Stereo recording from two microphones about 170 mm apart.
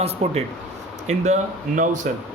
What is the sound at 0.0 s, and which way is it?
Speech, 35° right (ahead or behind).